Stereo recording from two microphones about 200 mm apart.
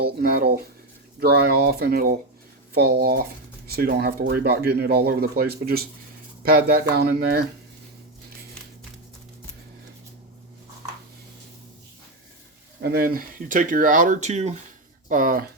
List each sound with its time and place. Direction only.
0.0 s speech: 50° right (ahead or behind)
12.8 s speech: 50° right (ahead or behind)